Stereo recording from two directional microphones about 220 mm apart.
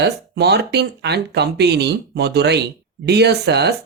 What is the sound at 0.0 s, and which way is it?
Speech, 50° right (ahead or behind).